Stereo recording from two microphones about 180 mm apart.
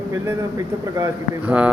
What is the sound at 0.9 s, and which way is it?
Speech, 15° right (ahead or behind).